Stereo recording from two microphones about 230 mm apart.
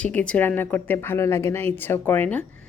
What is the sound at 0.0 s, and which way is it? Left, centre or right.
A woman's voice, centre.